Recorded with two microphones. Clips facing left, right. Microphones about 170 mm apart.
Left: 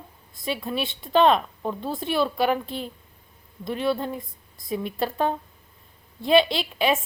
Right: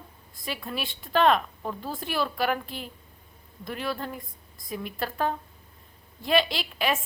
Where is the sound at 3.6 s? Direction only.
25° left (ahead or behind).